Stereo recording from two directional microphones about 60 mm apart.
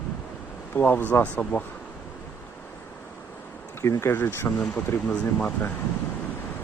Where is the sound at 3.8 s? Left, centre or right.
Left.